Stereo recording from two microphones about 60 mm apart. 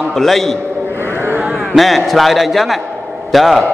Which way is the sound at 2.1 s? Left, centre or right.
Centre.